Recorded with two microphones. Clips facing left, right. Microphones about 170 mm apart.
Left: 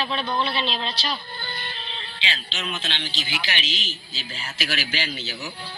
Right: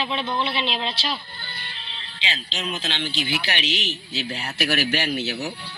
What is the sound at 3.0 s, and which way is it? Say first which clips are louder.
A man's voice: right 5 dB; 60° right (ahead or behind).